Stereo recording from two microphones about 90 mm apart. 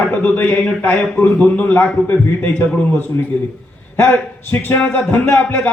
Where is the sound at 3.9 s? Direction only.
25° left (ahead or behind).